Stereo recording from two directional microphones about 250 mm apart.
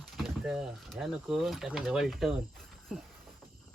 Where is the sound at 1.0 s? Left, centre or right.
Centre.